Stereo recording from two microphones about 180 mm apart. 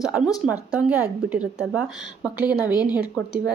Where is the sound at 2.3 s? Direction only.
20° left (ahead or behind).